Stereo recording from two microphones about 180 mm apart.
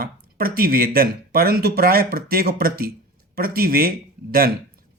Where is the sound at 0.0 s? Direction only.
55° right (ahead or behind).